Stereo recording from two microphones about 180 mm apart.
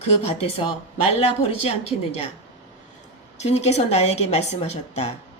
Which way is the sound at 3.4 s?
40° left (ahead or behind).